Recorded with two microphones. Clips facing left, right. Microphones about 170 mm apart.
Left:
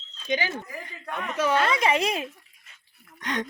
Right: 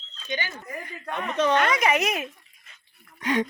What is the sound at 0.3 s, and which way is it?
Speech, 90° left.